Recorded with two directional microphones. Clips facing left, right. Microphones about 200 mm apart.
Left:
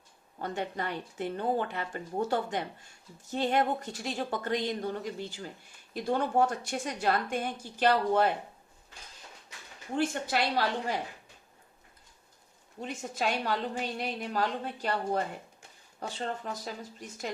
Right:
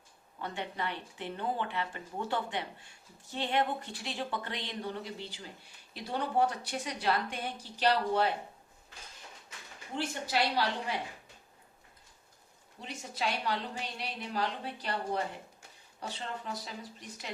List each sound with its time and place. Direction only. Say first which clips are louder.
0.3 s a woman's voice: left 4 dB; 45° left (ahead or behind)
9.9 s a woman's voice: left 4 dB; 50° left (ahead or behind)
12.8 s a woman's voice: left 4 dB; 45° left (ahead or behind)